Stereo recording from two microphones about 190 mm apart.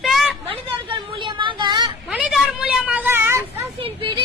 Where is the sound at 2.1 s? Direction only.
5° right (ahead or behind).